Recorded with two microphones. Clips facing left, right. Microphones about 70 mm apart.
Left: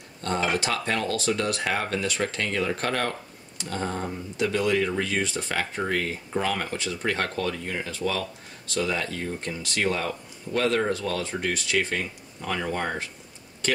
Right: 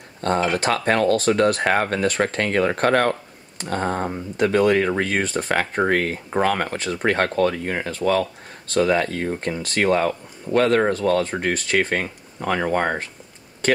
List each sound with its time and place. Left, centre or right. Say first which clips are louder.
0.2 s speech: right 6 dB; right